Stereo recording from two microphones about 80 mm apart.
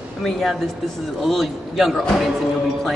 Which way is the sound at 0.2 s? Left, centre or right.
Centre.